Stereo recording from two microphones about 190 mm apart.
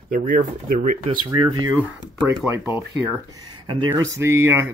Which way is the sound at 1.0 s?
25° right (ahead or behind).